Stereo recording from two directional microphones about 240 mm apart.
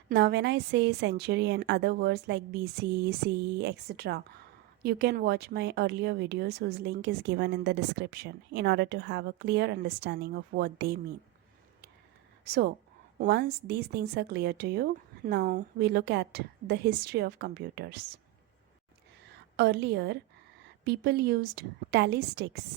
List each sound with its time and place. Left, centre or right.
0.1 s speech: right
12.5 s a woman's voice: right
19.5 s speech: right